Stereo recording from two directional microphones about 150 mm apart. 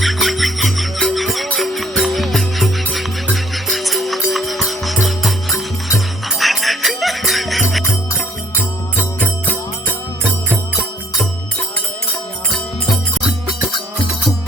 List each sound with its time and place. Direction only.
0.0 s music: centre (ahead or behind)
13.5 s music: 30° left (ahead or behind)